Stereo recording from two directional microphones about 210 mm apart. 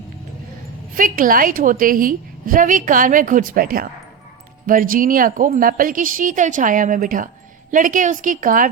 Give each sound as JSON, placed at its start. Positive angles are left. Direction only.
{"t": 0.9, "sound": "speech", "side_deg": -40}